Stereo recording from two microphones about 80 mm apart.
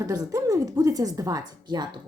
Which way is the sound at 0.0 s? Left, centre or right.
Right.